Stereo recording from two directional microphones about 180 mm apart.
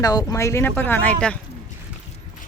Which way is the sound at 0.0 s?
20° left (ahead or behind).